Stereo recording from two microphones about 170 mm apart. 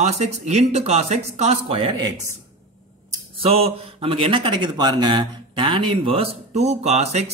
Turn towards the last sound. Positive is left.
turn(degrees=-40)  # may be behind; listen again after turning